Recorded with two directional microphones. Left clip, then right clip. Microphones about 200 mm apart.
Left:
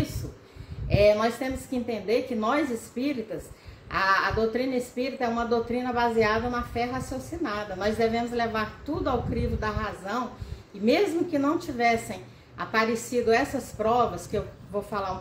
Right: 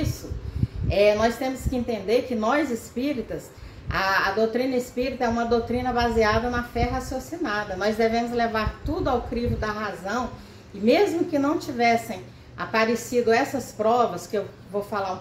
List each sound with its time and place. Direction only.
0.8 s a woman's voice: 5° left (ahead or behind)